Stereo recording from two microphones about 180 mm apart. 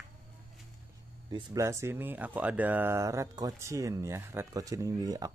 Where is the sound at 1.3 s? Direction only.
15° right (ahead or behind).